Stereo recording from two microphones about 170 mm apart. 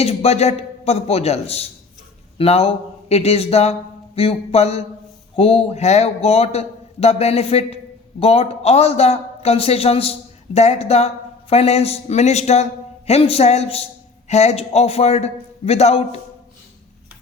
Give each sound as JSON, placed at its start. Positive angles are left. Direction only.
{"t": 0.0, "sound": "a man's voice", "side_deg": 35}